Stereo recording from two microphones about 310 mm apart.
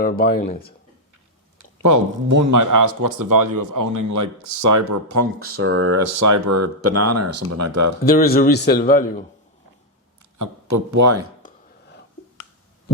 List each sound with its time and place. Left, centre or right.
0.0 s a man's voice: left
1.5 s speech: right
5.4 s speech: right
8.0 s a man's voice: left
10.3 s speech: right